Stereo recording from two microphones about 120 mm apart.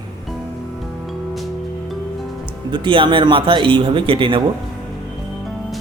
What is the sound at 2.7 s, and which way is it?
Speech, 45° right (ahead or behind).